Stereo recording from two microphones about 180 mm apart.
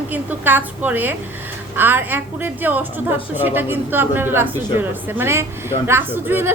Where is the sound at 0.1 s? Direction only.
10° right (ahead or behind).